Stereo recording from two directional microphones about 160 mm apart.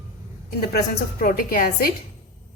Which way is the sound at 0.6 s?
70° left (ahead or behind).